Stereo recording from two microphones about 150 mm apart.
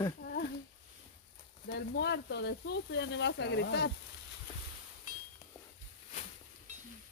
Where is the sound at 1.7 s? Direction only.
90° left.